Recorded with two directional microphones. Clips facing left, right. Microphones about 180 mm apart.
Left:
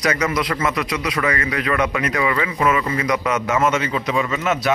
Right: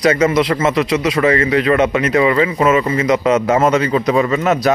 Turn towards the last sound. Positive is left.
turn(degrees=-40)  # may be behind; listen again after turning